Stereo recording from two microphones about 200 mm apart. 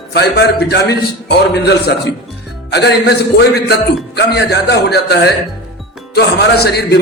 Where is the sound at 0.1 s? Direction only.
55° left (ahead or behind).